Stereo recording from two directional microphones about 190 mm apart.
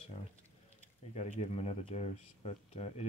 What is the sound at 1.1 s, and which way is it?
Speech, 35° left (ahead or behind).